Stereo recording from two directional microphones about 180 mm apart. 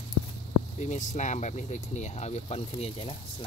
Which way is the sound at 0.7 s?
40° left (ahead or behind).